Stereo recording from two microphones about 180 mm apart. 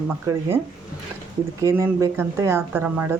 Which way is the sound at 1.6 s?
15° right (ahead or behind).